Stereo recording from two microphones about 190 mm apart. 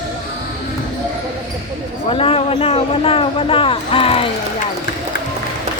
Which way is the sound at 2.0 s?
30° left (ahead or behind).